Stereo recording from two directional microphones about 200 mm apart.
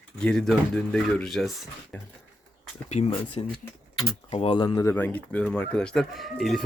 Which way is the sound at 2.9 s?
35° left (ahead or behind).